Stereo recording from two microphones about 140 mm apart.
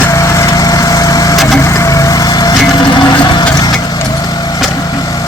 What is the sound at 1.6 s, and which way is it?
Vehicle, 20° left (ahead or behind).